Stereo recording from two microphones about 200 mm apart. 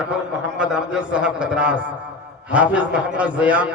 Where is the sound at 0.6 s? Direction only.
5° right (ahead or behind).